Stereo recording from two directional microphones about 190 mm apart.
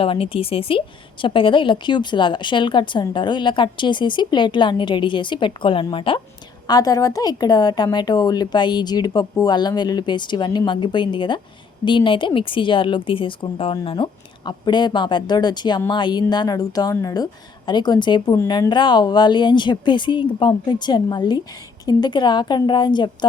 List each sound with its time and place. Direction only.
0.0 s a woman's voice: 30° left (ahead or behind)